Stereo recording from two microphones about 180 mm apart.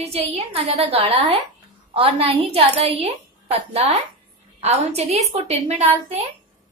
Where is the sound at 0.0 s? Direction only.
35° right (ahead or behind).